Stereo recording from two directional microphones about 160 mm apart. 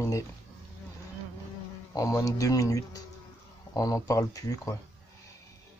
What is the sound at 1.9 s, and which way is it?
Speech, 20° left (ahead or behind).